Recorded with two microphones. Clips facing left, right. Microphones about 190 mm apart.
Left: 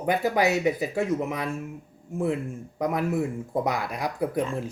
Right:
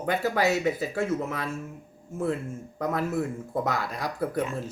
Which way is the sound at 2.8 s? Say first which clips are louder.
Left 2 dB; 15° left (ahead or behind).